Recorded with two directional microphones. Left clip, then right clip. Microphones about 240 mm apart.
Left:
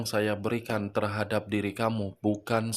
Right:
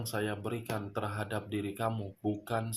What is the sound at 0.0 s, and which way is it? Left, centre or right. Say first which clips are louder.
Speech: left 7 dB; left.